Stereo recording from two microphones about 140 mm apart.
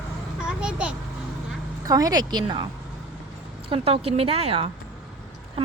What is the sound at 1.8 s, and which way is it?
Speech, 25° right (ahead or behind).